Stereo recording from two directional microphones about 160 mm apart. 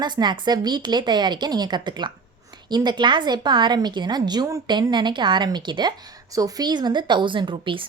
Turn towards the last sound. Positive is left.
turn(degrees=-30)  # may be behind; listen again after turning